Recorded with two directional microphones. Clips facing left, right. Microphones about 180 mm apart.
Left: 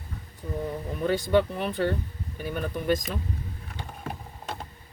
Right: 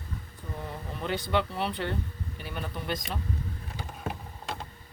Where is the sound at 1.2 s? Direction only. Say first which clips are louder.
Left 4 dB; 45° left (ahead or behind).